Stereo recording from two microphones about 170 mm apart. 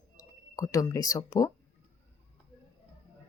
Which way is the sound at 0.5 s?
20° left (ahead or behind).